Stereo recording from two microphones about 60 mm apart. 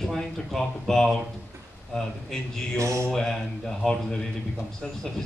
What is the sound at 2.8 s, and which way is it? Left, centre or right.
Mantra, right.